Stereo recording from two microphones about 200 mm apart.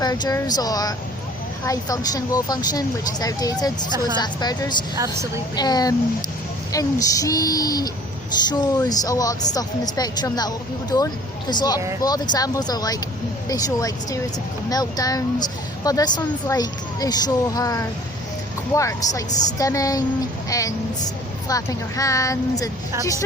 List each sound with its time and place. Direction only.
0.0 s speech: 20° left (ahead or behind)
4.9 s a woman's voice: 15° right (ahead or behind)
5.5 s speech: 20° left (ahead or behind)